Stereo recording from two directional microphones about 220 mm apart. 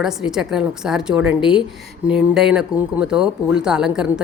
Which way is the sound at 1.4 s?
20° left (ahead or behind).